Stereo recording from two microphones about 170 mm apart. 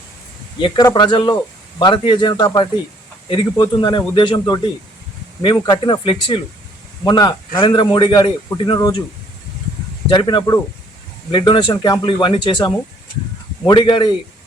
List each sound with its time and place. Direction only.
0.6 s speech: 25° left (ahead or behind)
10.1 s speech: 25° left (ahead or behind)